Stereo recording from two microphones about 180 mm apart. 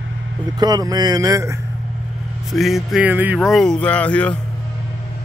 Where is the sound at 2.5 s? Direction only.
Centre (ahead or behind).